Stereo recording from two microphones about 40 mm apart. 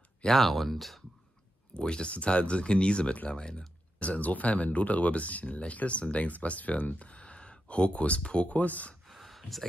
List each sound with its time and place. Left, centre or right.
0.3 s speech: centre
1.8 s speech: left
4.0 s speech: left
9.0 s a sound: centre